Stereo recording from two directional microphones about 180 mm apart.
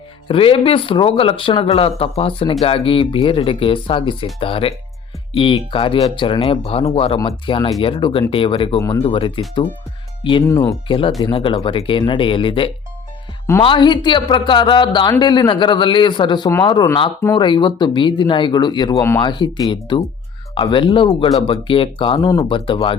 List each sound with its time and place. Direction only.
0.3 s speech: 30° left (ahead or behind)
10.4 s speech: 15° left (ahead or behind)
10.8 s speech: 30° left (ahead or behind)